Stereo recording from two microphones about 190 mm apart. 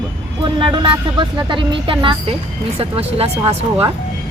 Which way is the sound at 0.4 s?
25° right (ahead or behind).